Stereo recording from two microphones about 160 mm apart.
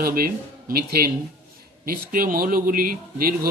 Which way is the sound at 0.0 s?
65° right (ahead or behind).